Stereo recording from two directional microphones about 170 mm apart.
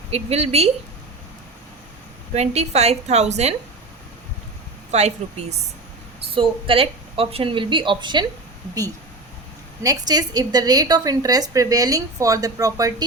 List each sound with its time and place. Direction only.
0.1 s a woman's voice: 35° right (ahead or behind)
2.3 s a woman's voice: 40° right (ahead or behind)
4.9 s a woman's voice: 40° right (ahead or behind)
9.8 s a woman's voice: 20° right (ahead or behind)